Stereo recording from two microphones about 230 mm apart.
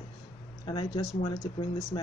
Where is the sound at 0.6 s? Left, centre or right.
Left.